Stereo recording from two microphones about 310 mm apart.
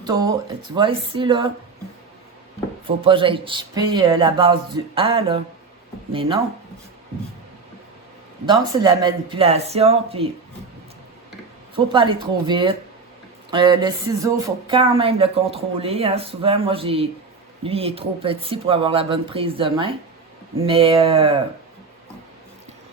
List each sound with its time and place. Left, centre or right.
0.0 s speech: centre
3.0 s speech: centre
8.4 s speech: centre
11.9 s speech: centre